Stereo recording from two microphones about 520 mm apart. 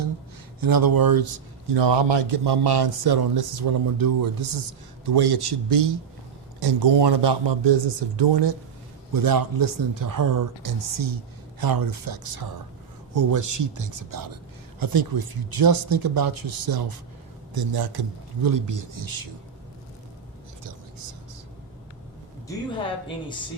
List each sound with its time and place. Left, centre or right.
0.6 s a man's voice: right
9.1 s a man's voice: right